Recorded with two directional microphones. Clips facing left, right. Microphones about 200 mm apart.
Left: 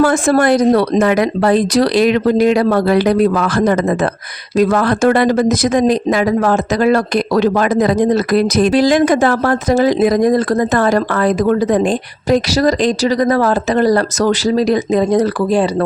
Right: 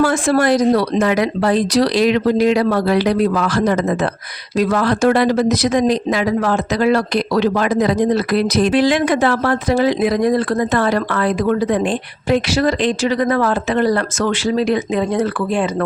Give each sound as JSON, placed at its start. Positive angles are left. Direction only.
{"t": 0.0, "sound": "speech", "side_deg": 50}